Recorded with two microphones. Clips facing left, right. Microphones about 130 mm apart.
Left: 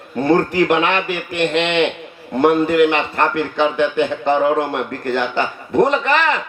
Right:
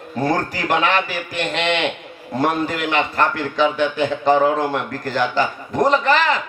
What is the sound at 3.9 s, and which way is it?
A man's voice, 35° right (ahead or behind).